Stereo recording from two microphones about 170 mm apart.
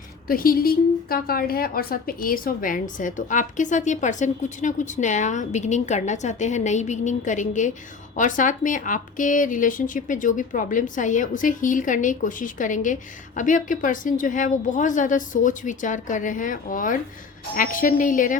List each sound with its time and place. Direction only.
0.3 s speech: 60° left (ahead or behind)